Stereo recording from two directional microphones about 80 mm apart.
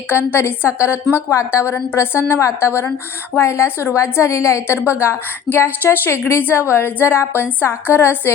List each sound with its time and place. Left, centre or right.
0.1 s a woman's voice: left